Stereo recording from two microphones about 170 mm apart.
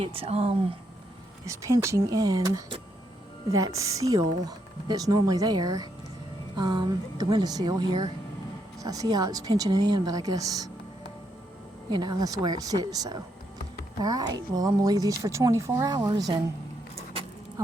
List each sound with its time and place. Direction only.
0.0 s speech: 35° right (ahead or behind)
1.5 s speech: 15° right (ahead or behind)
11.9 s speech: 25° right (ahead or behind)